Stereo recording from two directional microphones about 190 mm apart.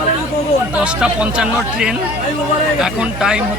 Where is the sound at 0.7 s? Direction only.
5° right (ahead or behind).